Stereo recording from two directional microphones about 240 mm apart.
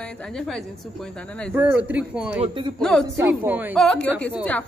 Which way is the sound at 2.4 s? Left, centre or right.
Centre.